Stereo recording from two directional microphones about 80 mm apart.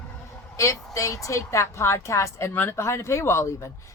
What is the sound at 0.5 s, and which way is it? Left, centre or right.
A woman's voice, left.